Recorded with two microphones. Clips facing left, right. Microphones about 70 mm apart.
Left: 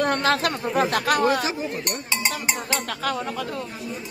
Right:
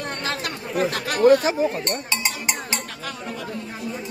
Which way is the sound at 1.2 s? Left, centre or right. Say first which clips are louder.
Right 6 dB; right.